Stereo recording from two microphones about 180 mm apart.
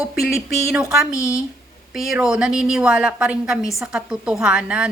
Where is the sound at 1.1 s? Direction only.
15° left (ahead or behind).